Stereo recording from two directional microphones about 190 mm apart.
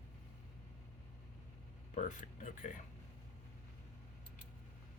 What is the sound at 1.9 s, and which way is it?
Speech, 40° left (ahead or behind).